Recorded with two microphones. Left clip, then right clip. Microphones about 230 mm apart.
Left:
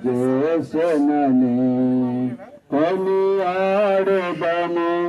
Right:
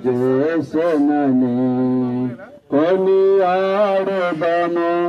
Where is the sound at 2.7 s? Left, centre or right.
Left.